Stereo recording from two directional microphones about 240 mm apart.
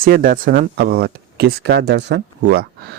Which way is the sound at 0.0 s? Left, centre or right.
Right.